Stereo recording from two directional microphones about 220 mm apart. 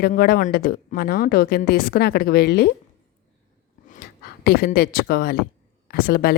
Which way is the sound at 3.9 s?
45° left (ahead or behind).